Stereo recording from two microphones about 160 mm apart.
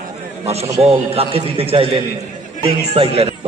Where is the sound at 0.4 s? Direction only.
40° right (ahead or behind).